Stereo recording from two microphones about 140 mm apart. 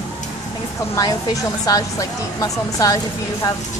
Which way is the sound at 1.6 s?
25° left (ahead or behind).